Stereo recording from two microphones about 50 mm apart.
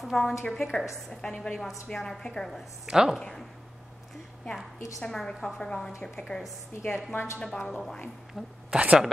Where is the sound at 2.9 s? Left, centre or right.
Centre.